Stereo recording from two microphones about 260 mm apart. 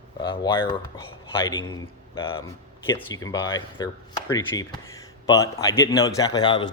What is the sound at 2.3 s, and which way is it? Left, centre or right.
Speech, centre.